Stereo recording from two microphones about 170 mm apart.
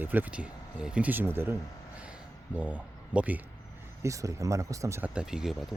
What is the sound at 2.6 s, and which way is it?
Speech, 5° right (ahead or behind).